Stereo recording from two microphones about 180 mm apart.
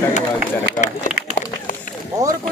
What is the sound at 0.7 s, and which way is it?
Speech, 45° left (ahead or behind).